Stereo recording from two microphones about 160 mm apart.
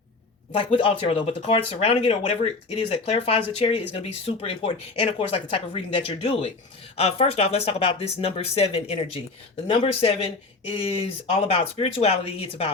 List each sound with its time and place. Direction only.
0.5 s speech: 35° left (ahead or behind)